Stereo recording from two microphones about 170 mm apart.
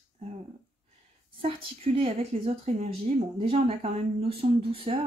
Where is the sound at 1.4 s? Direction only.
35° right (ahead or behind).